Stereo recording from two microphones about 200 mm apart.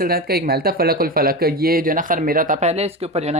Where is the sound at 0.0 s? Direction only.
50° right (ahead or behind).